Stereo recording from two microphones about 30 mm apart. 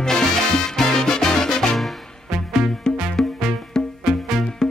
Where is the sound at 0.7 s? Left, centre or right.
Centre.